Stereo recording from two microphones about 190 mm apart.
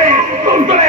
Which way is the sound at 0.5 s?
35° right (ahead or behind).